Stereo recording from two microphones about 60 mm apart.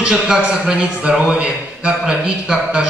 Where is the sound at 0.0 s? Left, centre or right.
Centre.